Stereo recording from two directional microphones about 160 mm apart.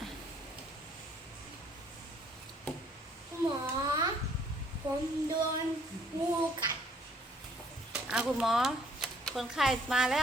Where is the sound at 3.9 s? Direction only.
25° right (ahead or behind).